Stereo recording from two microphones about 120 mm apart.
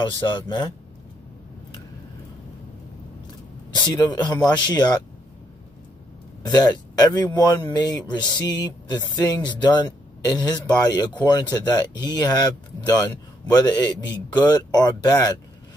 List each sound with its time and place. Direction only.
0.2 s speech: 40° left (ahead or behind)
3.9 s speech: 30° left (ahead or behind)
6.4 s speech: 35° left (ahead or behind)